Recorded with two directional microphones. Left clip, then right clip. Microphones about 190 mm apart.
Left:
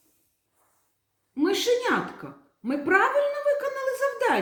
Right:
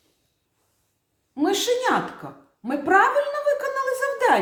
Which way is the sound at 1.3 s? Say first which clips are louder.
Right 1 dB; 30° right (ahead or behind).